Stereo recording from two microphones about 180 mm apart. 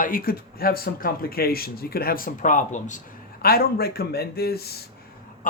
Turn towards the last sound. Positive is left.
turn(degrees=60)  # may be behind; listen again after turning